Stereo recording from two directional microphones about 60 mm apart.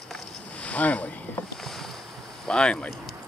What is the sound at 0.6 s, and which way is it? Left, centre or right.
Boat, left.